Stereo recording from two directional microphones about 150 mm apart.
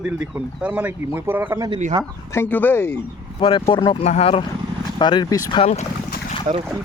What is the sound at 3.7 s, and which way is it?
Speech, 35° left (ahead or behind).